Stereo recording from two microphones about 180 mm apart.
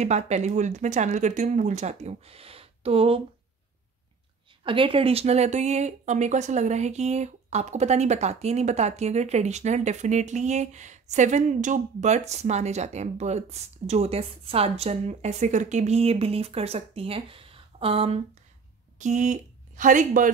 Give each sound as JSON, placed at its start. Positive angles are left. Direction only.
{"t": 0.0, "sound": "speech", "side_deg": -40}
{"t": 4.6, "sound": "a woman's voice", "side_deg": -30}